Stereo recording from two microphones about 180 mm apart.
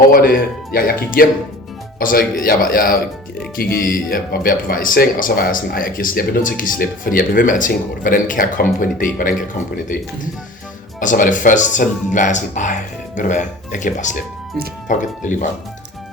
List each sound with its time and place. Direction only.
0.1 s a man's voice: 55° left (ahead or behind)
11.0 s speech: 45° left (ahead or behind)